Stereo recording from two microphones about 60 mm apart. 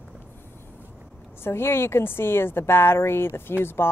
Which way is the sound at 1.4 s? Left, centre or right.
Left.